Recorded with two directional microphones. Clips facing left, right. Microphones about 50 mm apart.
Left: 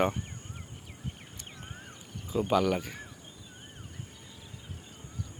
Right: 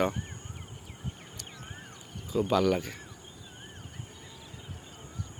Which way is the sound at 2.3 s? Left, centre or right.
Centre.